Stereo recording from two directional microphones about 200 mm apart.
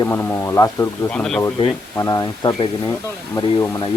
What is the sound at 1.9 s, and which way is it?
Speech, 15° left (ahead or behind).